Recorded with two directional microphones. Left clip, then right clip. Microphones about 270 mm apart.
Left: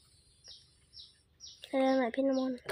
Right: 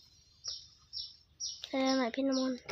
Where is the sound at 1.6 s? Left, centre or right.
Centre.